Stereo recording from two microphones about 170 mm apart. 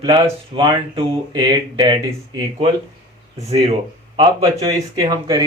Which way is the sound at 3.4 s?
35° right (ahead or behind).